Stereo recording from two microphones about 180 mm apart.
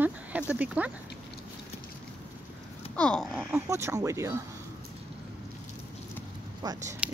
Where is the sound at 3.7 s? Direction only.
15° right (ahead or behind).